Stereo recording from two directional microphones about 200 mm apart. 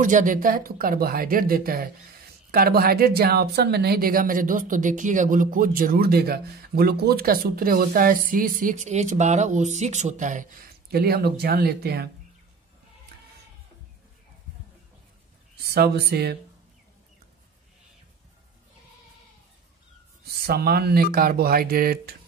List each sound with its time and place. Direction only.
0.0 s speech: 40° right (ahead or behind)
15.5 s speech: 55° right (ahead or behind)
20.4 s speech: 50° right (ahead or behind)